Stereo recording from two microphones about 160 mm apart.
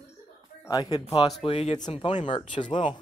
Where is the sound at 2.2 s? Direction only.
30° left (ahead or behind).